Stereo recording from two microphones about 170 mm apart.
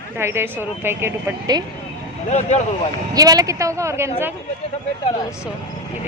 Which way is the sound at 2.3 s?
45° left (ahead or behind).